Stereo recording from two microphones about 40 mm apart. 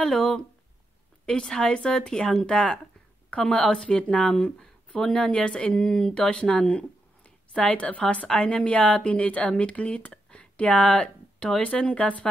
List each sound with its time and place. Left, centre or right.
0.0 s speech: centre
1.6 s speech: left
4.5 s a woman's voice: centre; by 12.3 s left